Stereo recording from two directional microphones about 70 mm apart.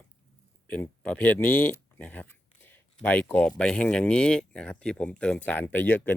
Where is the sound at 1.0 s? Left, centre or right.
Centre.